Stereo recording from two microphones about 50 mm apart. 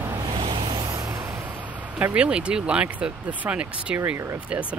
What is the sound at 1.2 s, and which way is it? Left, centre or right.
Vehicle, right.